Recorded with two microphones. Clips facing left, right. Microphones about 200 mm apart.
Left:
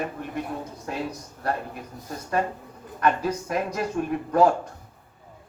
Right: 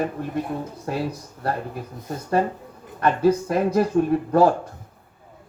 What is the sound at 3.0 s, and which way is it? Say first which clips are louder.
Speech: right 5 dB; 30° right (ahead or behind).